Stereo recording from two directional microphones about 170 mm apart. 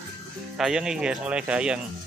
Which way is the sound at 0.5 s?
5° right (ahead or behind).